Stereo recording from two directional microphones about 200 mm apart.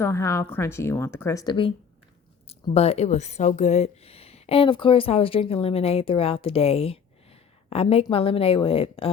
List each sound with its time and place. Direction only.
0.0 s speech: 15° left (ahead or behind)
2.7 s a woman's voice: 30° left (ahead or behind)